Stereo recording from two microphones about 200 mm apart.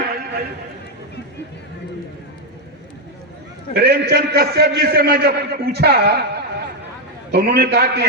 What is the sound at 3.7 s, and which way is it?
A man's voice, 55° right (ahead or behind).